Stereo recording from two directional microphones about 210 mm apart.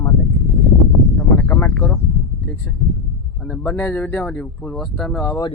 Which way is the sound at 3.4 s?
5° left (ahead or behind).